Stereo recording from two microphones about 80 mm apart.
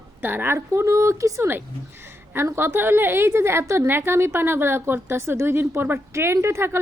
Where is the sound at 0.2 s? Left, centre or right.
Right.